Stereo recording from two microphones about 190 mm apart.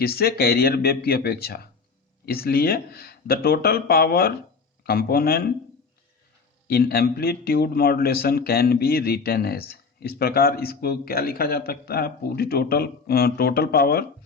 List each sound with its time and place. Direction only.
0.0 s speech: 55° left (ahead or behind)
6.7 s speech: 55° left (ahead or behind)